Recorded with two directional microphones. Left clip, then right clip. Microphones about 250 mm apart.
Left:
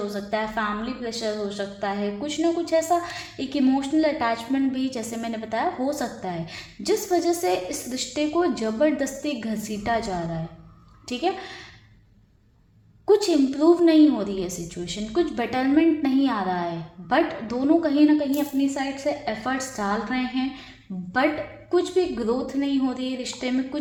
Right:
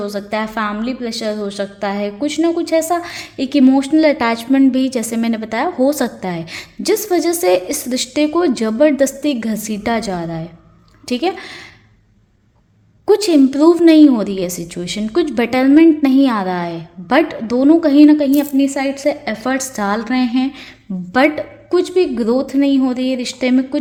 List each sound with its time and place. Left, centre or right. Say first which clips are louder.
0.1 s a woman's voice: right 6 dB; right
13.1 s a woman's voice: right 7 dB; right